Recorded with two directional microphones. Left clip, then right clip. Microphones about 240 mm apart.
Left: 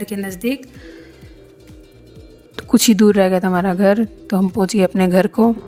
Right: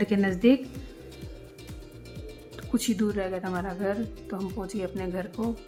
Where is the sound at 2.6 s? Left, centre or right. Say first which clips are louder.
Left 15 dB; left.